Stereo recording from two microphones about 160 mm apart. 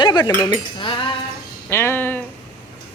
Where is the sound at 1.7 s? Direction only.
15° left (ahead or behind).